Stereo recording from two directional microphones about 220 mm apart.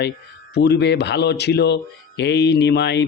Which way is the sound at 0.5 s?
50° left (ahead or behind).